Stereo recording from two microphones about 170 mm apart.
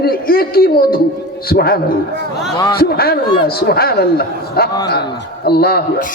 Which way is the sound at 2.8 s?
65° left (ahead or behind).